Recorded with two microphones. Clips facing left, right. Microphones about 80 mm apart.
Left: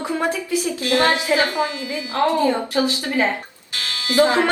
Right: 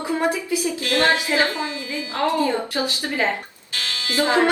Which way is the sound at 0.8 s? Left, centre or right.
Left.